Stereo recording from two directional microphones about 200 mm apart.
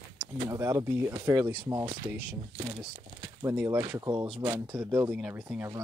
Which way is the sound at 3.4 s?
10° right (ahead or behind).